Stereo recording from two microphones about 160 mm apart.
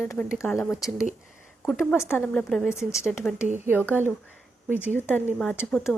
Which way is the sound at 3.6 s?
15° right (ahead or behind).